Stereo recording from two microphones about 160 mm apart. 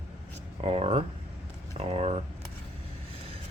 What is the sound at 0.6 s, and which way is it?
Speech, 40° right (ahead or behind).